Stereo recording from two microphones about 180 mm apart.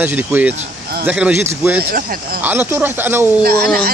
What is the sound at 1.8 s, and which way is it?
Speech, 55° right (ahead or behind).